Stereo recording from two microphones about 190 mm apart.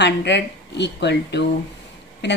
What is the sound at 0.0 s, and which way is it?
Speech, 65° left (ahead or behind).